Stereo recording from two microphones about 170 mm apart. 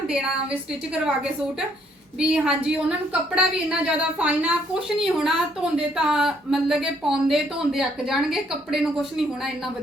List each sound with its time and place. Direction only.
0.9 s a woman's voice: 5° right (ahead or behind)